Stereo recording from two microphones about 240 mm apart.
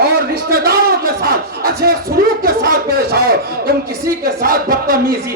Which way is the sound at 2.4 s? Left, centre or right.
Right.